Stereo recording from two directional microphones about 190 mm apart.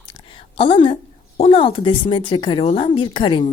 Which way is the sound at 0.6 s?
30° left (ahead or behind).